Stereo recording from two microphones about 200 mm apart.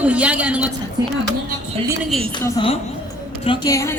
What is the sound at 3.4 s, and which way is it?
Speech, 25° left (ahead or behind).